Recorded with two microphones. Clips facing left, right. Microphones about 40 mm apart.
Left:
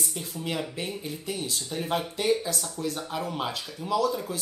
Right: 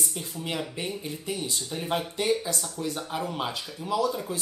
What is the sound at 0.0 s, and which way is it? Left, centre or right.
Speech, centre.